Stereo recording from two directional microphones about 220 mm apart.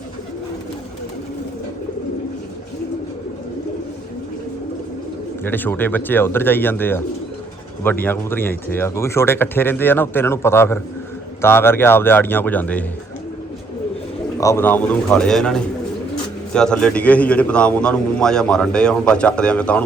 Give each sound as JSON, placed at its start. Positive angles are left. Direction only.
{"t": 5.4, "sound": "speech", "side_deg": 10}
{"t": 14.3, "sound": "a man's voice", "side_deg": 15}